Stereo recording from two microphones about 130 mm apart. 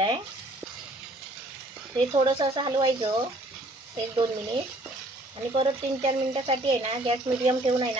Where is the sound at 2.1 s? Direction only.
35° right (ahead or behind).